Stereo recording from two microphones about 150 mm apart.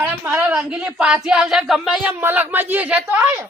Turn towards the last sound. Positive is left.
turn(degrees=-10)  # may be behind; listen again after turning